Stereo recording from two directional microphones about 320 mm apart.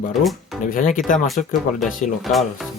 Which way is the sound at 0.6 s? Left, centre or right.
Left.